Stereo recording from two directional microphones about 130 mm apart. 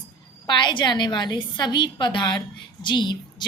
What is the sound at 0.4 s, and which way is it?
A woman's voice, 35° left (ahead or behind).